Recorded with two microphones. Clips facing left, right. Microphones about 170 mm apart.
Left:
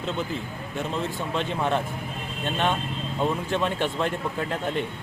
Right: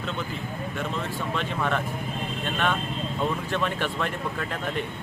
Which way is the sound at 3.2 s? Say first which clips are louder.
Left 3 dB; 30° left (ahead or behind).